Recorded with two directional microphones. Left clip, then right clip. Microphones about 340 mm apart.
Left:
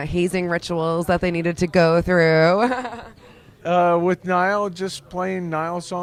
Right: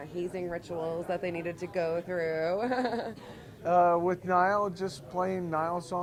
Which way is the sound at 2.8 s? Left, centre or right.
Left.